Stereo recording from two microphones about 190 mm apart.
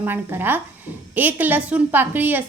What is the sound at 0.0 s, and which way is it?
A woman's voice, 10° right (ahead or behind).